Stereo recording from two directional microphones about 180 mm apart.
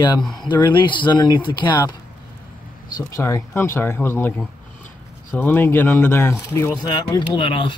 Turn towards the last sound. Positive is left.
turn(degrees=30)  # may be behind; listen again after turning